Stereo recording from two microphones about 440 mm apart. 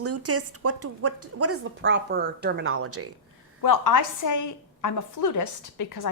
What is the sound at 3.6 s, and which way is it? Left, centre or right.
A woman's voice, left.